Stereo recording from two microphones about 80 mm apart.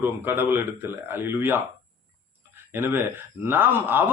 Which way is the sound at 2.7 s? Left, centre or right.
Right.